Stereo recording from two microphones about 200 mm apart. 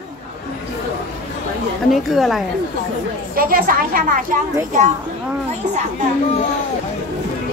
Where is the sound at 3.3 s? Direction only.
45° right (ahead or behind).